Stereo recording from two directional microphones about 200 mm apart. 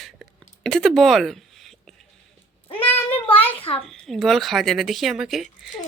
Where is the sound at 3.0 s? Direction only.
30° left (ahead or behind).